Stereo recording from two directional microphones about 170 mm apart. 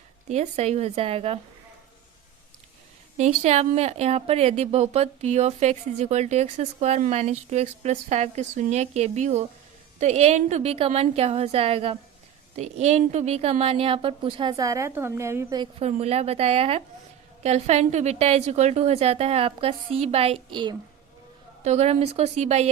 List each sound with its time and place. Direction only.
0.3 s a woman's voice: 40° right (ahead or behind)
3.2 s a woman's voice: 40° right (ahead or behind); by 15.7 s 20° right (ahead or behind)
15.8 s a woman's voice: 40° right (ahead or behind)